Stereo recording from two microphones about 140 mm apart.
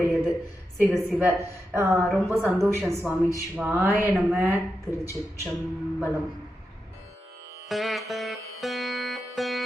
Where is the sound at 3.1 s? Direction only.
5° right (ahead or behind).